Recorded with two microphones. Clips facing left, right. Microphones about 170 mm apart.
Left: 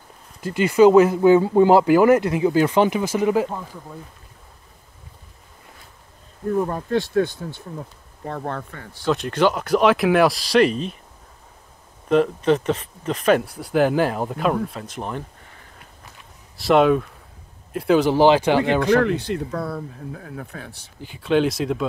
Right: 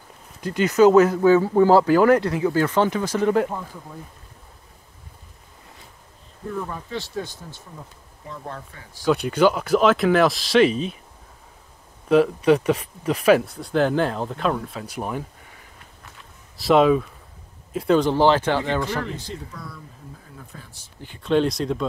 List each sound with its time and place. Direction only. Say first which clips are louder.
0.4 s speech: left 2 dB; 5° left (ahead or behind)
6.5 s speech: left 9 dB; 45° left (ahead or behind); by 8.8 s 70° left (ahead or behind)
9.0 s speech: right 1 dB; 5° right (ahead or behind)
12.1 s speech: right 1 dB; 5° right (ahead or behind)
16.5 s speech: even; centre (ahead or behind)
18.8 s speech: left 9 dB; 65° left (ahead or behind)
21.0 s speech: left 1 dB; 5° left (ahead or behind)